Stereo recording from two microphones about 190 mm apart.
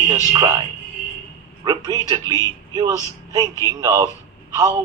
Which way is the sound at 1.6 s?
20° right (ahead or behind).